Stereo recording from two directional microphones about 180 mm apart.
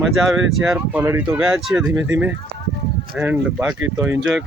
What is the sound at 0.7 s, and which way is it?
Speech, 10° right (ahead or behind).